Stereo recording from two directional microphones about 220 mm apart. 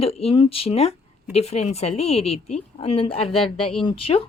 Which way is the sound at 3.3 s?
Centre (ahead or behind).